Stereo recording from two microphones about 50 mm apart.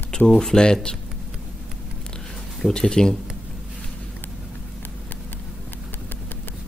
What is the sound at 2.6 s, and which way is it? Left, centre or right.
Speech, centre.